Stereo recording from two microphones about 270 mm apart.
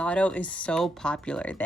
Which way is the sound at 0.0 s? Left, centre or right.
Centre.